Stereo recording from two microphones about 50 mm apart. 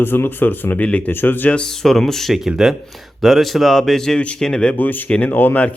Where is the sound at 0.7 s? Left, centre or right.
Left.